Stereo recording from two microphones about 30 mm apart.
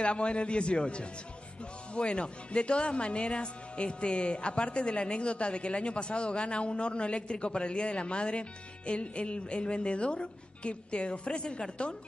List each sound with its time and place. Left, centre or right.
0.0 s speech: left